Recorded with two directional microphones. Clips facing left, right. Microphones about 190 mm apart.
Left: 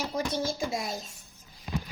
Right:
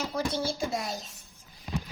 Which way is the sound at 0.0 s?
15° left (ahead or behind).